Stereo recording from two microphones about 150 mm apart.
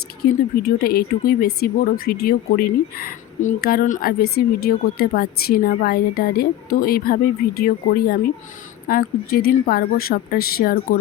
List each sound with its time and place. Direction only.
0.2 s speech: 70° left (ahead or behind)
0.6 s speech: 85° left
8.9 s speech: 75° left (ahead or behind)